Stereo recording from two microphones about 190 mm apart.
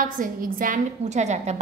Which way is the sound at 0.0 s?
45° right (ahead or behind).